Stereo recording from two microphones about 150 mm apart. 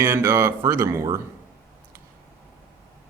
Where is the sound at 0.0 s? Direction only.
15° right (ahead or behind).